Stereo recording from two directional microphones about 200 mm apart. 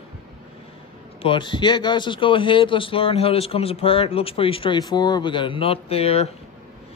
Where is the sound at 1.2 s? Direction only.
25° left (ahead or behind).